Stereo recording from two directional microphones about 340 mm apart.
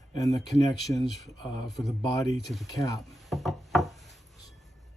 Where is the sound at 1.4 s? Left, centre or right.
Centre.